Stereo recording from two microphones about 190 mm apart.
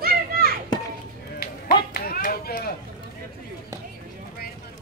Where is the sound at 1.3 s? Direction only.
55° left (ahead or behind).